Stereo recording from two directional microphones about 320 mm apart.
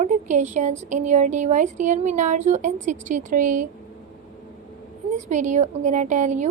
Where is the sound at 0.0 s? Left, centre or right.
Right.